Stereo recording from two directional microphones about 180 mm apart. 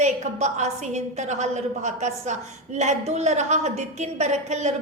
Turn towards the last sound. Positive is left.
turn(degrees=-40)  # may be behind; listen again after turning